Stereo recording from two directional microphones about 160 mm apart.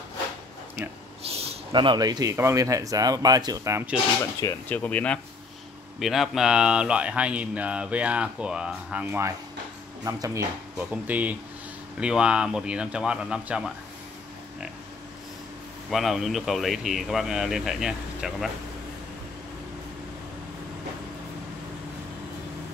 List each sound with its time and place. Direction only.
1.2 s speech: 40° right (ahead or behind); by 3.8 s 20° right (ahead or behind)
4.2 s speech: 20° left (ahead or behind); by 10.4 s 20° right (ahead or behind)
10.8 s speech: 10° right (ahead or behind)
15.9 s speech: centre (ahead or behind)